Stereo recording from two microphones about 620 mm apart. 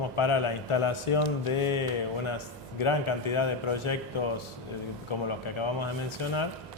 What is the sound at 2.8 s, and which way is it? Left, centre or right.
A man's voice, left.